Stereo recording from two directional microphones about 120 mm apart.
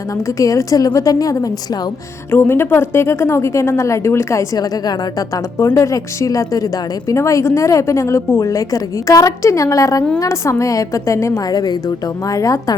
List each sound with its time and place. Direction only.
0.3 s a woman's voice: 30° left (ahead or behind)
2.3 s a woman's voice: 20° left (ahead or behind)